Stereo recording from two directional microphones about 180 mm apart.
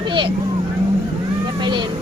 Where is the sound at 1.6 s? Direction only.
25° right (ahead or behind).